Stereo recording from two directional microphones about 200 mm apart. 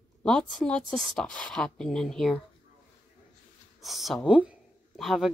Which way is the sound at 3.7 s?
Centre (ahead or behind).